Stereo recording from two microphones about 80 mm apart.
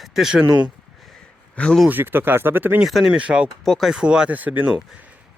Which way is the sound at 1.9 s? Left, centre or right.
Right.